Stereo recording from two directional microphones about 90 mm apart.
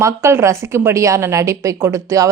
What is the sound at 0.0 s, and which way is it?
A woman's voice, 30° right (ahead or behind).